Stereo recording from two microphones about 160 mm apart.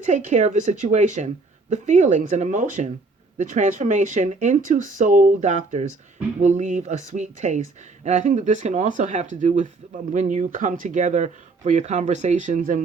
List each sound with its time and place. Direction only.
0.0 s speech: 50° right (ahead or behind)